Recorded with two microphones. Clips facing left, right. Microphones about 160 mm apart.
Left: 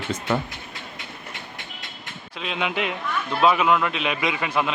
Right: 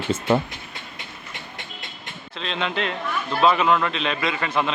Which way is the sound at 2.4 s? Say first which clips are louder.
Even; 10° left (ahead or behind).